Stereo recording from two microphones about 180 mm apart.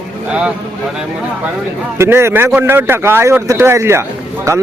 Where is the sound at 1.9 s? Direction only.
15° right (ahead or behind).